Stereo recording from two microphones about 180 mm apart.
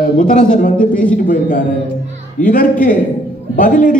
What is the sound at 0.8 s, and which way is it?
Speech, 5° left (ahead or behind).